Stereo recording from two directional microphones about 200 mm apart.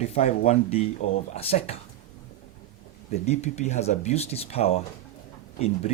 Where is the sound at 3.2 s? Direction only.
35° left (ahead or behind).